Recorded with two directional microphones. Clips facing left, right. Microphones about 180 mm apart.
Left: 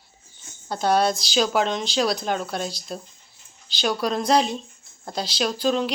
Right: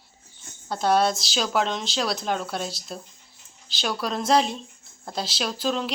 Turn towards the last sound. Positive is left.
turn(degrees=0)  # may be behind; listen again after turning